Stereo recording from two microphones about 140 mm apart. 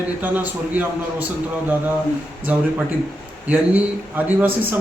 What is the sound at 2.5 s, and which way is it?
Speech, 10° right (ahead or behind).